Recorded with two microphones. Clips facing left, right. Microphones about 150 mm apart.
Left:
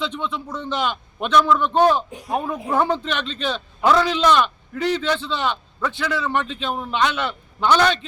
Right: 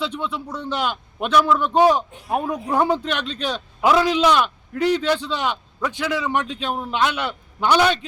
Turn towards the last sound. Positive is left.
turn(degrees=-10)  # may be behind; listen again after turning